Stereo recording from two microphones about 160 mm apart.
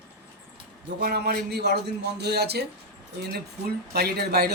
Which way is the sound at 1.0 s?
80° right.